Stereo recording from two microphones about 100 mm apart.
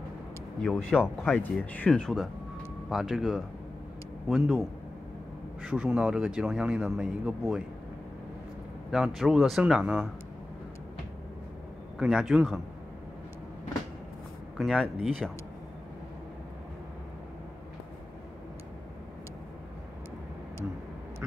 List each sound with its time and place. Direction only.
0.6 s speech: 5° left (ahead or behind)
1.3 s speech: 15° left (ahead or behind)
1.9 s speech: 5° left (ahead or behind)
8.9 s speech: centre (ahead or behind)
12.0 s speech: 5° right (ahead or behind)
14.6 s speech: 5° right (ahead or behind)